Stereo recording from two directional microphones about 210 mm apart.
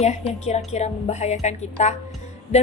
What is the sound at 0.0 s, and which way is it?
A woman's voice, 30° left (ahead or behind).